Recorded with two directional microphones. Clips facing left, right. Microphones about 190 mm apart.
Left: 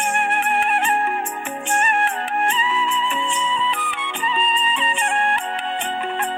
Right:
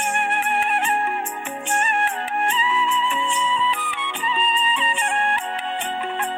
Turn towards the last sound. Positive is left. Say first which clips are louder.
# left 2 dB
turn(degrees=60)  # may be behind; listen again after turning